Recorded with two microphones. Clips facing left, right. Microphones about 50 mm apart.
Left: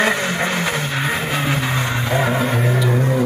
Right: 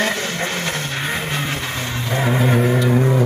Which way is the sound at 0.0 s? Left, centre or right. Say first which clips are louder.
Left 3 dB; centre.